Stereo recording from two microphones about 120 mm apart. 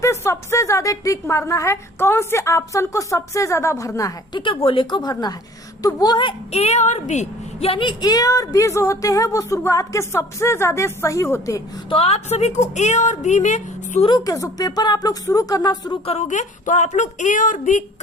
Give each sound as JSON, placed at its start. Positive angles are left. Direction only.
{"t": 0.0, "sound": "a woman's voice", "side_deg": 25}
{"t": 4.4, "sound": "a woman's voice", "side_deg": 45}
{"t": 7.7, "sound": "a woman's voice", "side_deg": 40}
{"t": 11.9, "sound": "a woman's voice", "side_deg": 55}
{"t": 14.3, "sound": "speech", "side_deg": 30}
{"t": 16.0, "sound": "speech", "side_deg": 75}